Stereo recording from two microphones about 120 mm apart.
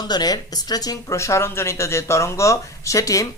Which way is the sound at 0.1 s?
35° left (ahead or behind).